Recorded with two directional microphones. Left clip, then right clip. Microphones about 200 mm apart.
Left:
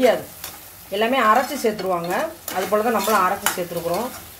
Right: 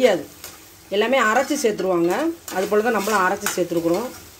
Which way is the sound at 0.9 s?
45° right (ahead or behind).